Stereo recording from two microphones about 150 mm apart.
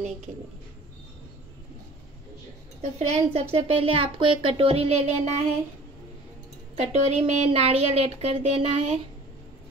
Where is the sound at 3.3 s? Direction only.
40° right (ahead or behind).